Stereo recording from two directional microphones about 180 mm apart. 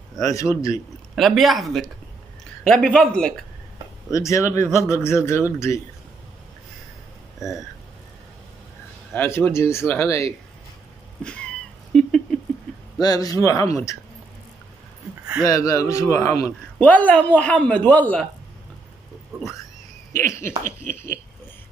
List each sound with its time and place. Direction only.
0.2 s a man's voice: 20° left (ahead or behind)
1.1 s speech: centre (ahead or behind)
4.1 s a man's voice: 15° left (ahead or behind)
7.3 s speech: centre (ahead or behind)
9.1 s a man's voice: 10° left (ahead or behind)
11.9 s rodents: 5° left (ahead or behind)
13.0 s speech: 20° left (ahead or behind)
15.4 s a man's voice: 20° left (ahead or behind)
20.1 s a man's voice: 15° left (ahead or behind)